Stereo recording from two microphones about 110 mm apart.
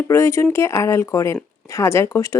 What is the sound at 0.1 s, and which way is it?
A woman's voice, 25° left (ahead or behind).